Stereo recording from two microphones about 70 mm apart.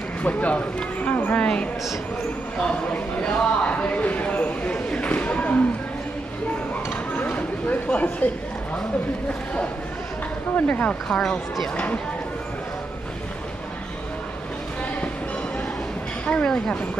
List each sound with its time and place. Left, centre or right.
0.2 s speech: left
2.6 s a sound: centre
7.2 s a sound: left
10.5 s speech: left
11.1 s speech: centre
11.7 s speech: centre
16.3 s speech: centre